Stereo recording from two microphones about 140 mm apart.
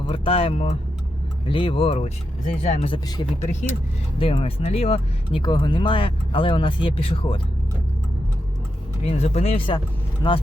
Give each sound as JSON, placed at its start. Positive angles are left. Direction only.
{"t": 0.1, "sound": "speech", "side_deg": 40}
{"t": 1.5, "sound": "speech", "side_deg": 35}
{"t": 3.4, "sound": "speech", "side_deg": 60}
{"t": 4.2, "sound": "speech", "side_deg": 40}
{"t": 5.4, "sound": "speech", "side_deg": 35}
{"t": 9.0, "sound": "speech", "side_deg": 50}
{"t": 10.2, "sound": "speech", "side_deg": 30}